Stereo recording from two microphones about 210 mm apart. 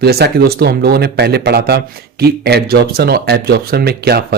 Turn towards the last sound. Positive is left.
turn(degrees=-50)  # may be behind; listen again after turning